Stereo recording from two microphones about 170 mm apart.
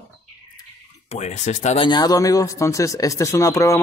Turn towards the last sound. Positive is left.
turn(degrees=20)  # may be behind; listen again after turning